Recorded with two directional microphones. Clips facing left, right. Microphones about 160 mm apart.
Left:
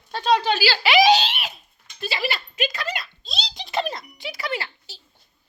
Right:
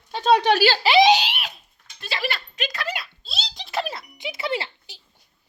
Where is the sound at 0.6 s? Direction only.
35° right (ahead or behind).